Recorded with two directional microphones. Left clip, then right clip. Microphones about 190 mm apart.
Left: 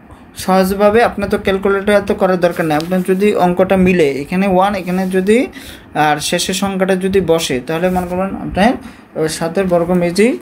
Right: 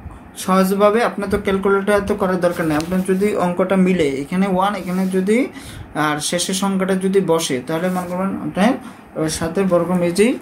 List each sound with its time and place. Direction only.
0.5 s speech: 40° left (ahead or behind)